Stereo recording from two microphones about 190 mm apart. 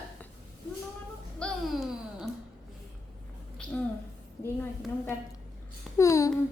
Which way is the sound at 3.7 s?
5° left (ahead or behind).